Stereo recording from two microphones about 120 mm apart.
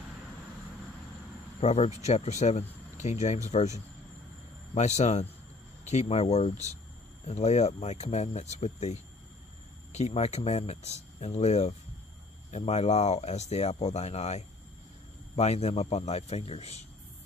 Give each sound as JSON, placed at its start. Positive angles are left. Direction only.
{"t": 1.6, "sound": "speech", "side_deg": 65}